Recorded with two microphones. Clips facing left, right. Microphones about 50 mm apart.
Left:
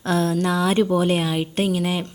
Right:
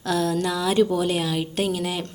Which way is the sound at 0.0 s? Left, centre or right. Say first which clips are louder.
Left 2 dB; left.